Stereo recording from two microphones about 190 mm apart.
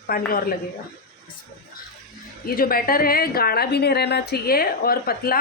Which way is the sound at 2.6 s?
50° left (ahead or behind).